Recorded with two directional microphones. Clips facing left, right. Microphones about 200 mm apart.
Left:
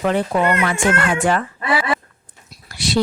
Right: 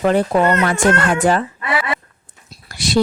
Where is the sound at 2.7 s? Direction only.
45° right (ahead or behind).